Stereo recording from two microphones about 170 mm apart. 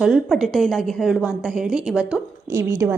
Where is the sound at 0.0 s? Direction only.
Centre (ahead or behind).